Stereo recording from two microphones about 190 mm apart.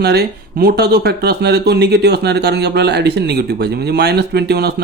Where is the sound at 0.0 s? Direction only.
60° right (ahead or behind).